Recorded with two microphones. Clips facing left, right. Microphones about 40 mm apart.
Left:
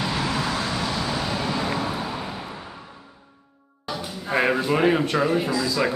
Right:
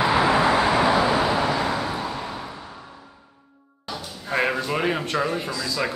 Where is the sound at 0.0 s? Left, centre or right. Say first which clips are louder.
Right 7 dB; right.